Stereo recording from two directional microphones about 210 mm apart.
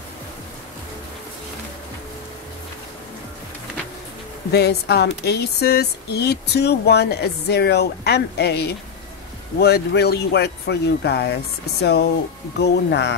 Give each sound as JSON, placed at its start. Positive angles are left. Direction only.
{"t": 4.5, "sound": "speech", "side_deg": 50}